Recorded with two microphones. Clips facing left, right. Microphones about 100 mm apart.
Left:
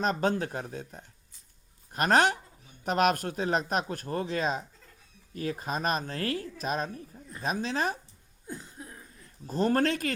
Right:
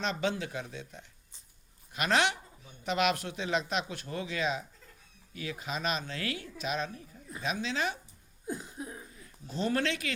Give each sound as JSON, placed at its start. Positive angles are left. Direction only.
{"t": 0.0, "sound": "a man's voice", "side_deg": 45}
{"t": 8.4, "sound": "a sound", "side_deg": -15}
{"t": 9.5, "sound": "a man's voice", "side_deg": 45}